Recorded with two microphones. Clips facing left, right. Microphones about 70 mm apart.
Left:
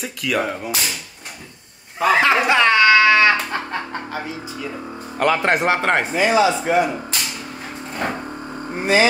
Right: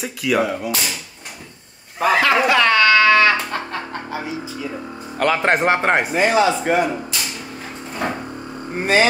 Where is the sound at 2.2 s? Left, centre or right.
Left.